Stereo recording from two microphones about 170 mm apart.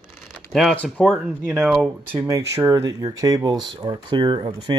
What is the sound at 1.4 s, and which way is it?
Speech, 10° right (ahead or behind).